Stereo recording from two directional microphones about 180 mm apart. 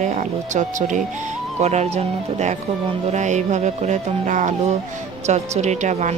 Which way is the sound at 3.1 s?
40° right (ahead or behind).